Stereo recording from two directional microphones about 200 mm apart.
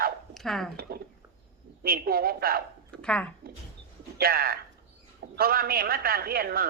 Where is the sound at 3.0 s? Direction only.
5° left (ahead or behind).